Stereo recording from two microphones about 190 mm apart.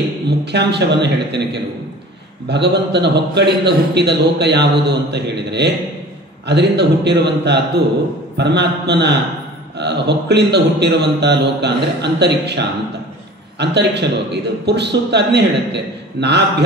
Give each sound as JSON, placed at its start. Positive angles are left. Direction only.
{"t": 0.5, "sound": "a man's voice", "side_deg": -60}